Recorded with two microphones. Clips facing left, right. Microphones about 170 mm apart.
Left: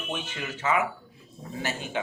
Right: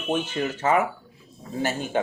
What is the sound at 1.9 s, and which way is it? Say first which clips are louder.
Speech: right 7 dB; 45° right (ahead or behind).